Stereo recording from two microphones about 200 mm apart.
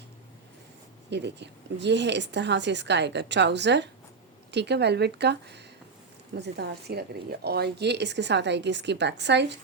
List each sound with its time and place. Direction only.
1.1 s a woman's voice: 60° right (ahead or behind)